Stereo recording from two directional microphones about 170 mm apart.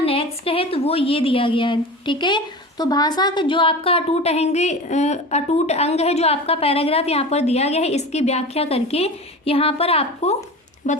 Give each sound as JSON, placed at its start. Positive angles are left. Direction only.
{"t": 0.0, "sound": "a woman's voice", "side_deg": 35}
{"t": 10.8, "sound": "speech", "side_deg": 45}